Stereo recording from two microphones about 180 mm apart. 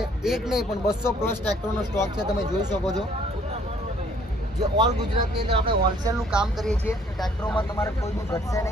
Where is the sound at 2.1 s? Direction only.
20° right (ahead or behind).